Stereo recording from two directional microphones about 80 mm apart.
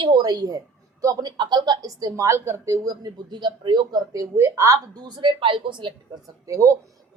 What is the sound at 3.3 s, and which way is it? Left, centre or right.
Speech, right.